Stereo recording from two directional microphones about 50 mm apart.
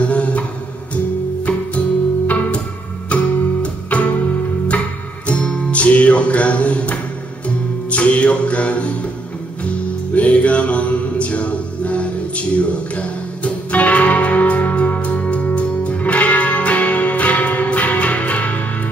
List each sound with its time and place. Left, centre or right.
0.0 s a sound: left
2.2 s music: left
10.1 s music: left